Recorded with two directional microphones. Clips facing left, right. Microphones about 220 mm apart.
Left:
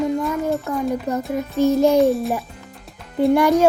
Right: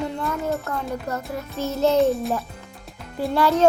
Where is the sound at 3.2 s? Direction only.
15° left (ahead or behind).